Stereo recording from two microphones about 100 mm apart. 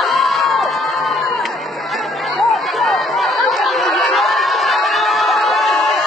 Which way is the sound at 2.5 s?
Centre (ahead or behind).